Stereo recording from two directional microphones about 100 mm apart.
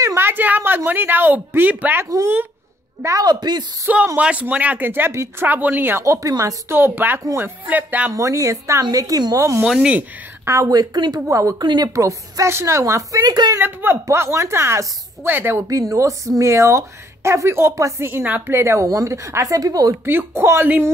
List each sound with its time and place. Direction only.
0.0 s a woman's voice: 25° right (ahead or behind)
2.0 s a woman's voice: 35° right (ahead or behind)
3.8 s speech: 15° right (ahead or behind); by 6.5 s 35° right (ahead or behind)
6.7 s speech: 20° right (ahead or behind)
8.1 s speech: 30° right (ahead or behind)
9.7 s speech: 10° right (ahead or behind)
10.4 s speech: 30° right (ahead or behind)
11.1 s speech: 35° right (ahead or behind)
11.6 s a woman's voice: 50° right (ahead or behind)
11.9 s speech: 35° right (ahead or behind)
13.6 s speech: 20° right (ahead or behind)
15.9 s speech: 35° right (ahead or behind)
20.1 s speech: 25° right (ahead or behind)